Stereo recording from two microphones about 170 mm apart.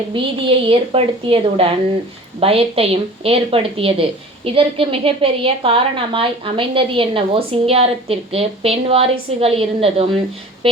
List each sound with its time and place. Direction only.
0.1 s a woman's voice: 30° right (ahead or behind)